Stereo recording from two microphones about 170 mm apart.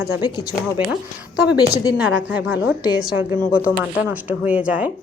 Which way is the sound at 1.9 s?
10° right (ahead or behind).